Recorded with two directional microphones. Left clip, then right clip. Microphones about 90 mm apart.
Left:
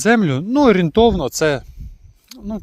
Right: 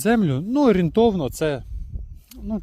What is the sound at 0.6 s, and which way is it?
Speech, 40° right (ahead or behind).